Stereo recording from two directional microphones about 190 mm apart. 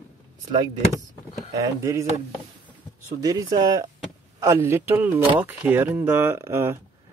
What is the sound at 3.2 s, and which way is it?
Speech, 20° right (ahead or behind).